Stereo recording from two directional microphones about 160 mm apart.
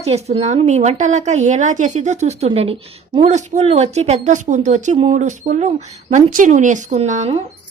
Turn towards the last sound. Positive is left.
turn(degrees=-45)  # may be behind; listen again after turning